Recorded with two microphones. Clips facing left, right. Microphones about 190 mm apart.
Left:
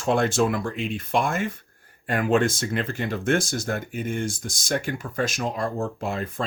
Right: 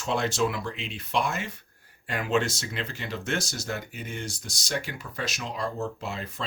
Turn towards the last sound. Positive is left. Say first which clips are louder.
# left 7 dB
turn(degrees=50)  # may be behind; listen again after turning